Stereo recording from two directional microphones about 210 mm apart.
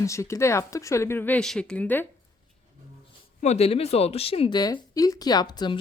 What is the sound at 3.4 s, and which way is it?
Speech, 30° left (ahead or behind).